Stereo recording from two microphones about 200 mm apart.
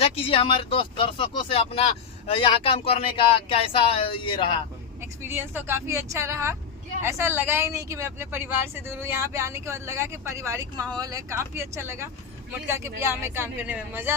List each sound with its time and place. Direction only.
0.0 s speech: 25° left (ahead or behind)
4.9 s speech: 10° right (ahead or behind)